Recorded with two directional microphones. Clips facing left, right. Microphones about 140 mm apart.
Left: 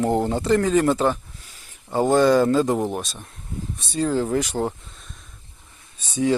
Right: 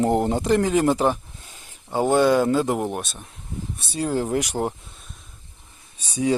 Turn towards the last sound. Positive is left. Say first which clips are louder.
# left 1 dB
turn(degrees=-15)  # may be behind; listen again after turning